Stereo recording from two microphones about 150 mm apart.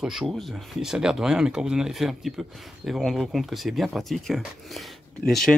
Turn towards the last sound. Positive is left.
turn(degrees=5)  # may be behind; listen again after turning